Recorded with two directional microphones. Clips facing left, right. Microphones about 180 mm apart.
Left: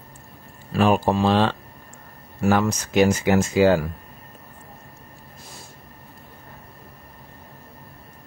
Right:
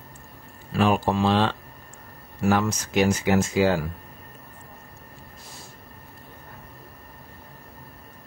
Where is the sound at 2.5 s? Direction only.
50° left (ahead or behind).